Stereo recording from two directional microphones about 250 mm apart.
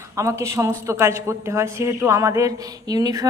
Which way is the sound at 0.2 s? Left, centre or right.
Centre.